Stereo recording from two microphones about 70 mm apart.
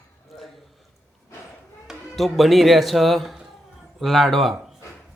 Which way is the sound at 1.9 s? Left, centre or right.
Centre.